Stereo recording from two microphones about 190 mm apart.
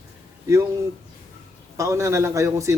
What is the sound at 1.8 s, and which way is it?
Speech, 15° right (ahead or behind).